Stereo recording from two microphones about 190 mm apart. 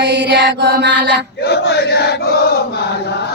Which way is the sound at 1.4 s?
60° left (ahead or behind).